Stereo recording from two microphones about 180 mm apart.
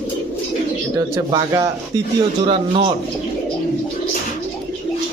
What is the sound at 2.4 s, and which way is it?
Speech, 30° right (ahead or behind).